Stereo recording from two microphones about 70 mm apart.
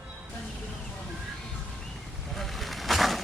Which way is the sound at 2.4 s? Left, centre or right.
Centre.